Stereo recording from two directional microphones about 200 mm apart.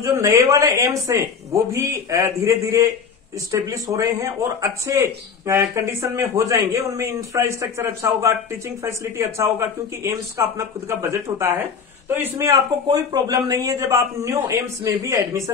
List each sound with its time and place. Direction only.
0.0 s speech: 15° right (ahead or behind)